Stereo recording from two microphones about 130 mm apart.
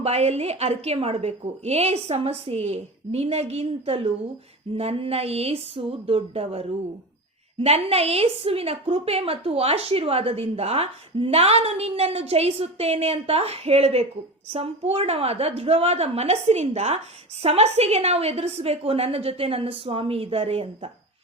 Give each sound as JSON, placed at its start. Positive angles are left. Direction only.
{"t": 0.0, "sound": "a woman's voice", "side_deg": -55}